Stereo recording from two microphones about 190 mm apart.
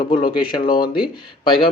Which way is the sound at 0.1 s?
25° left (ahead or behind).